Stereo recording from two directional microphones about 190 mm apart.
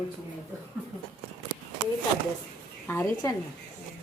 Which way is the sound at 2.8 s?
15° left (ahead or behind).